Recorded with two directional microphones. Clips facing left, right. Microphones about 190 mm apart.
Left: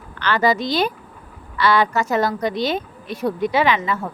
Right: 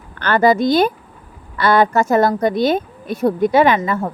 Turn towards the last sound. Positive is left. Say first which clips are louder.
# right 5 dB
turn(degrees=-50)  # may be behind; listen again after turning